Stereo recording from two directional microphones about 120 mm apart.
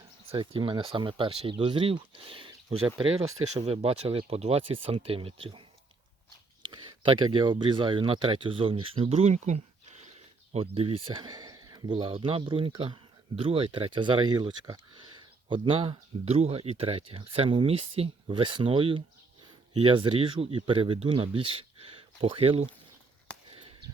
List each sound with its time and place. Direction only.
0.3 s speech: 50° right (ahead or behind)
6.7 s speech: 40° right (ahead or behind); by 9.6 s 75° right (ahead or behind)
10.5 s speech: 50° right (ahead or behind)
23.5 s a sound: 50° right (ahead or behind)